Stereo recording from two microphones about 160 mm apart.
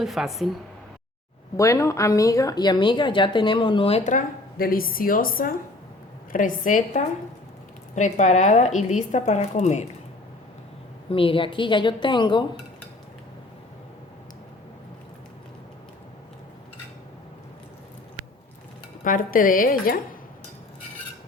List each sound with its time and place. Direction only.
0.0 s speech: centre (ahead or behind)
1.5 s speech: 20° left (ahead or behind); by 9.8 s 45° left (ahead or behind)
11.1 s a woman's voice: 35° left (ahead or behind)
19.0 s speech: 60° left (ahead or behind)